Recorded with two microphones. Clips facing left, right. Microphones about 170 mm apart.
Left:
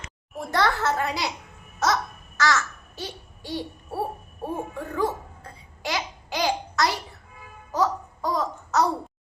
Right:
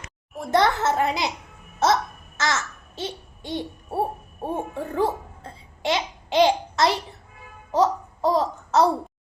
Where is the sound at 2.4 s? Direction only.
20° right (ahead or behind).